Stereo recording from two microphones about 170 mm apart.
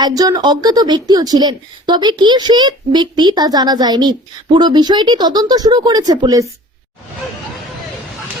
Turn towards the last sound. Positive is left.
turn(degrees=-20)  # may be behind; listen again after turning